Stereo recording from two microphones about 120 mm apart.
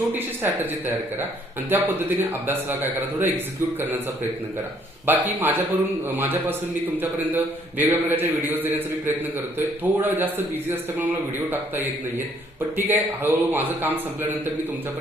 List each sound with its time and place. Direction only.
0.4 s a man's voice: 15° right (ahead or behind)
5.0 s a man's voice: 15° right (ahead or behind)